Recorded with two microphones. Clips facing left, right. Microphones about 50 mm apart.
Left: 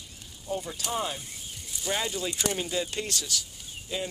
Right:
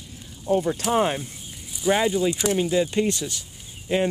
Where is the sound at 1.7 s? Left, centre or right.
Centre.